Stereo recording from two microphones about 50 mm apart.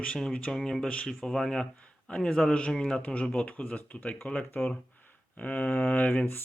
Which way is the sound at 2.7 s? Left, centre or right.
Centre.